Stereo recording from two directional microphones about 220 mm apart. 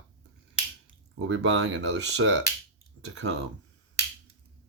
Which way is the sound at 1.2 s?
55° right (ahead or behind).